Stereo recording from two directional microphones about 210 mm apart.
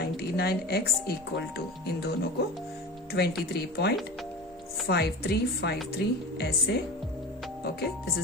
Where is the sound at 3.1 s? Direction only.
50° left (ahead or behind).